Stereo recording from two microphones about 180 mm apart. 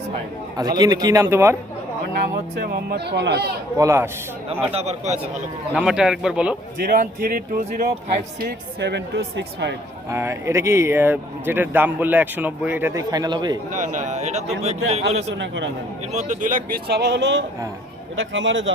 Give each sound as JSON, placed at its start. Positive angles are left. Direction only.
{"t": 0.5, "sound": "a man's voice", "side_deg": -20}
{"t": 2.6, "sound": "speech", "side_deg": -60}
{"t": 3.8, "sound": "speech", "side_deg": -15}
{"t": 4.7, "sound": "a man's voice", "side_deg": -35}
{"t": 5.7, "sound": "a man's voice", "side_deg": -5}
{"t": 6.8, "sound": "speech", "side_deg": -50}
{"t": 8.4, "sound": "speech", "side_deg": -65}
{"t": 10.1, "sound": "speech", "side_deg": -15}
{"t": 13.7, "sound": "a man's voice", "side_deg": -45}
{"t": 15.4, "sound": "a man's voice", "side_deg": -90}
{"t": 16.1, "sound": "speech", "side_deg": -45}
{"t": 18.2, "sound": "a man's voice", "side_deg": -90}